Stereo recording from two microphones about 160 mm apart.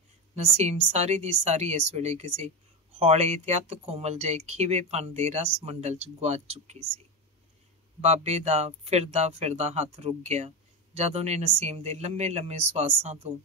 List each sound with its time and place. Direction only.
0.4 s speech: 45° right (ahead or behind)
8.0 s speech: 40° right (ahead or behind)